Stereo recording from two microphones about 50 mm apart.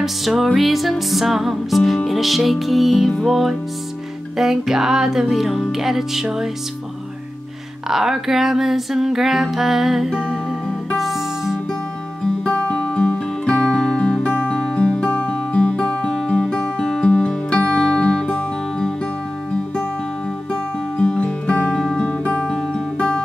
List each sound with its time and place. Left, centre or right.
0.0 s music: centre
7.9 s music: centre
12.4 s music: left
21.0 s music: centre
21.7 s music: centre
22.0 s music: left